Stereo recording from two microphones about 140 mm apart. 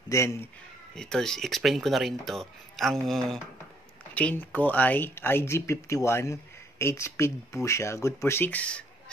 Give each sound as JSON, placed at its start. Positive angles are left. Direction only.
{"t": 0.1, "sound": "speech", "side_deg": 20}
{"t": 0.9, "sound": "speech", "side_deg": 5}